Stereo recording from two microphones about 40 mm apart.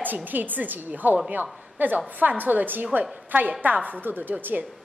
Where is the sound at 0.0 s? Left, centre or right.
Right.